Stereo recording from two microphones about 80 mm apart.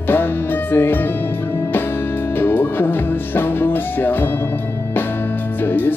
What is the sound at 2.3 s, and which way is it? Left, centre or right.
Music, left.